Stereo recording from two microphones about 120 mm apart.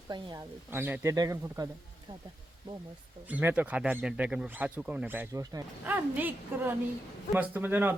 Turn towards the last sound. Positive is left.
turn(degrees=-15)  # may be behind; listen again after turning